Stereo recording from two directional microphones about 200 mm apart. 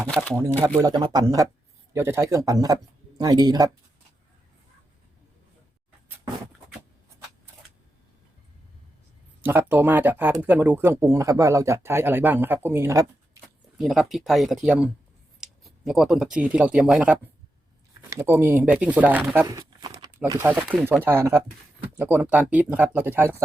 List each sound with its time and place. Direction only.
0.8 s speech: 20° right (ahead or behind)
9.4 s speech: 10° right (ahead or behind)
13.7 s speech: centre (ahead or behind)